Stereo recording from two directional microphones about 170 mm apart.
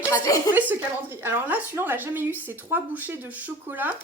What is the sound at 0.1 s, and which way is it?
Speech, 20° left (ahead or behind).